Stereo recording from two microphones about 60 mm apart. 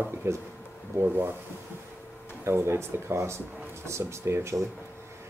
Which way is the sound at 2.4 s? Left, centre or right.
Right.